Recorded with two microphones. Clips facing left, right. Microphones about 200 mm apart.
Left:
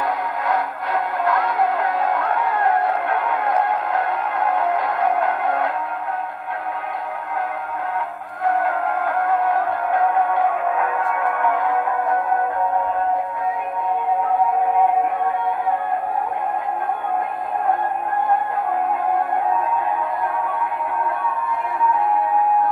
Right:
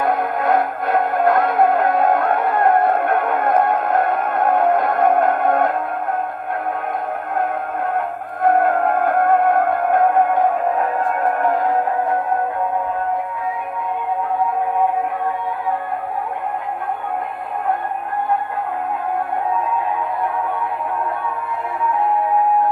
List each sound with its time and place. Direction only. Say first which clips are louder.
0.0 s music: right 5 dB; 50° right (ahead or behind)
8.5 s music: right 5 dB; 50° right (ahead or behind)